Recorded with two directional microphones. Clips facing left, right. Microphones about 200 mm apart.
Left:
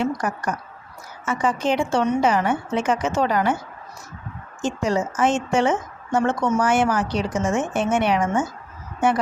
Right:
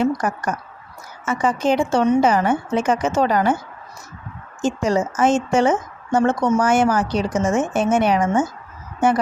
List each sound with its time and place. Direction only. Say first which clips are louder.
0.0 s a woman's voice: right 4 dB; 45° right (ahead or behind)
4.6 s a woman's voice: right 3 dB; 40° right (ahead or behind)